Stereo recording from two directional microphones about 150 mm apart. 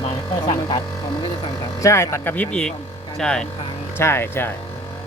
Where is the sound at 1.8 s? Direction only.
20° left (ahead or behind); by 3.5 s 5° left (ahead or behind).